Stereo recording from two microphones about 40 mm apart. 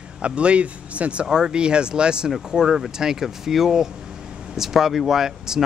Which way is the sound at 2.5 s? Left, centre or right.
Centre.